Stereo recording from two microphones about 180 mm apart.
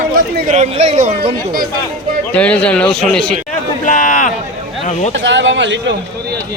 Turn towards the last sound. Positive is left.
turn(degrees=-90)